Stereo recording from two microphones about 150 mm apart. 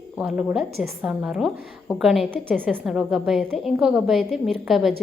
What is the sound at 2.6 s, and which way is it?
A woman's voice, 10° right (ahead or behind).